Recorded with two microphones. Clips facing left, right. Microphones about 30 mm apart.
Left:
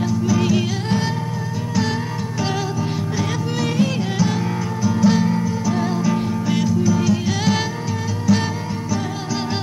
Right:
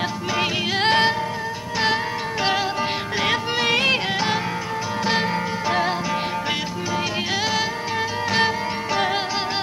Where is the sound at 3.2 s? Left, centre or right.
Right.